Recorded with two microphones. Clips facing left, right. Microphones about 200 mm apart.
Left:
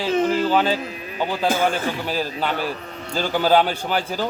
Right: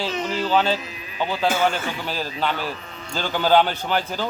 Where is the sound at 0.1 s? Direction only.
50° left (ahead or behind).